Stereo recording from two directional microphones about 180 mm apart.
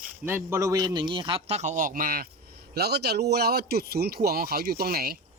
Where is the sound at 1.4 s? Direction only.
40° right (ahead or behind).